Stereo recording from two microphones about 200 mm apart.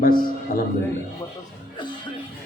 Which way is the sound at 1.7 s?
25° left (ahead or behind).